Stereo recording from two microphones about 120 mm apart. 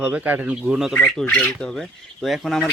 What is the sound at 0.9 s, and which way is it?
Speech, 10° left (ahead or behind).